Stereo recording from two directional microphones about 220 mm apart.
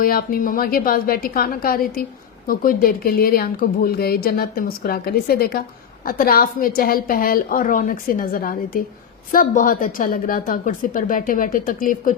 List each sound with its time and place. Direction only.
0.0 s a woman's voice: 40° left (ahead or behind)